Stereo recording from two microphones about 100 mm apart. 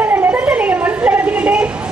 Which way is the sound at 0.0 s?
15° right (ahead or behind).